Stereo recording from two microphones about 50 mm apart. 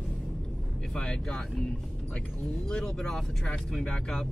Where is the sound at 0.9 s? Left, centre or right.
Centre.